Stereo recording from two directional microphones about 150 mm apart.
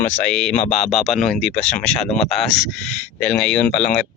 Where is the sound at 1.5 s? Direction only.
50° left (ahead or behind).